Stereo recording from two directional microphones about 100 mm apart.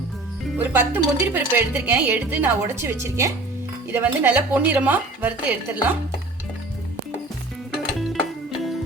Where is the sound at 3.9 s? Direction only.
15° right (ahead or behind).